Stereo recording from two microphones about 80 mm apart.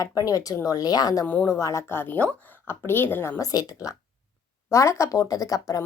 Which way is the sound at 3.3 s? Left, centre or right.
Left.